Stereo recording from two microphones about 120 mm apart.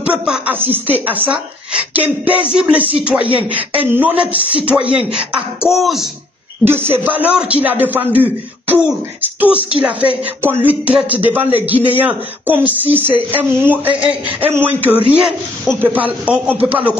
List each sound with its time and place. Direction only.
0.0 s a sound: 10° right (ahead or behind)
0.6 s a woman's voice: 15° right (ahead or behind)
6.6 s a woman's voice: 20° right (ahead or behind)